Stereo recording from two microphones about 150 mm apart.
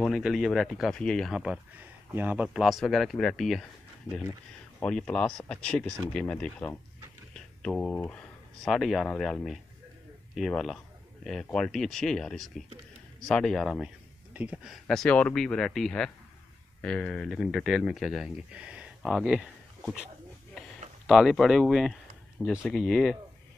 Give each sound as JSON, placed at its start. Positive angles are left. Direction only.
{"t": 0.0, "sound": "speech", "side_deg": 0}
{"t": 4.7, "sound": "speech", "side_deg": 5}
{"t": 14.3, "sound": "speech", "side_deg": -10}
{"t": 21.1, "sound": "speech", "side_deg": 0}